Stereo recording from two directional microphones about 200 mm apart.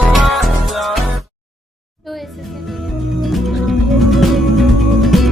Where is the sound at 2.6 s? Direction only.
Centre (ahead or behind).